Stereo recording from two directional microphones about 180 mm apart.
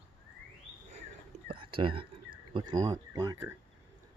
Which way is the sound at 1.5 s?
30° right (ahead or behind).